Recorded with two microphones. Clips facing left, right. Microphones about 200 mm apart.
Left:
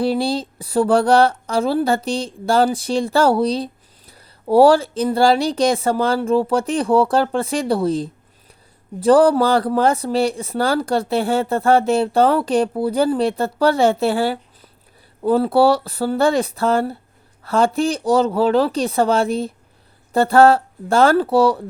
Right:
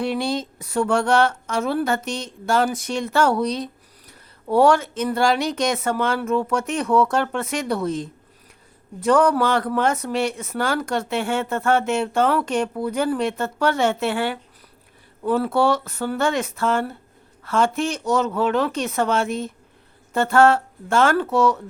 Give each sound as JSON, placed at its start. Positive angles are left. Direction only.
{"t": 0.0, "sound": "speech", "side_deg": 35}